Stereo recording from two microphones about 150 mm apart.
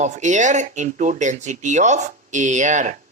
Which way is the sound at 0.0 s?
55° right (ahead or behind).